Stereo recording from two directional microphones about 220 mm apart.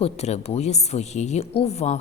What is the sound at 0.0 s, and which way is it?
Speech, 30° left (ahead or behind).